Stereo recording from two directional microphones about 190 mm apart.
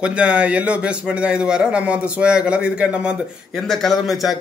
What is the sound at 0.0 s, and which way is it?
A man's voice, 5° right (ahead or behind).